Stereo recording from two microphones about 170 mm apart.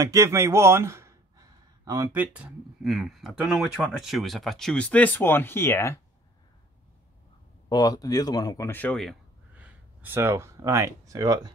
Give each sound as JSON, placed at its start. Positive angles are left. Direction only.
{"t": 0.0, "sound": "a sound", "side_deg": -15}
{"t": 2.3, "sound": "speech", "side_deg": 0}
{"t": 7.7, "sound": "speech", "side_deg": 20}
{"t": 9.6, "sound": "speech", "side_deg": -10}